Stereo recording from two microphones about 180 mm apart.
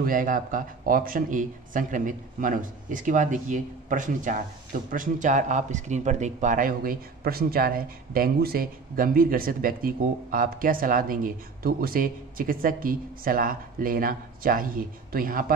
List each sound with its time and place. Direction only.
0.0 s speech: 50° right (ahead or behind)